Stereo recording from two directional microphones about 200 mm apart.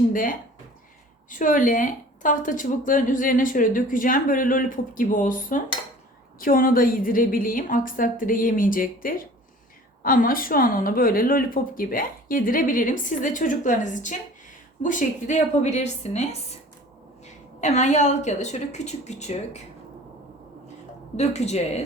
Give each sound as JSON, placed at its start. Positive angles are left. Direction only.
{"t": 0.1, "sound": "speech", "side_deg": 45}
{"t": 21.2, "sound": "speech", "side_deg": 35}